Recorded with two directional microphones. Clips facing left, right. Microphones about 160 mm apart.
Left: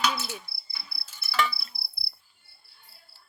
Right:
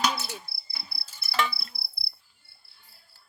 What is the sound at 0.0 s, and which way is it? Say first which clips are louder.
Cricket: even; 40° right (ahead or behind).